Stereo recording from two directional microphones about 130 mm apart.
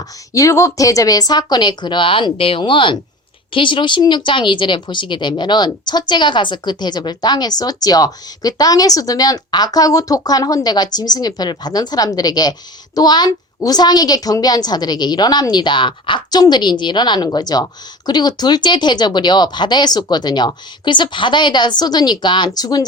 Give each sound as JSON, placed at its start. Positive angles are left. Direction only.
{"t": 0.3, "sound": "speech", "side_deg": 25}